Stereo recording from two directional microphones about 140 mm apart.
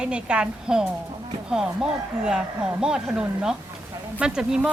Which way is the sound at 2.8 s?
5° right (ahead or behind).